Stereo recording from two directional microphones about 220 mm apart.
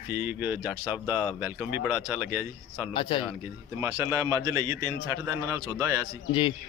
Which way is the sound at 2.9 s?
20° left (ahead or behind).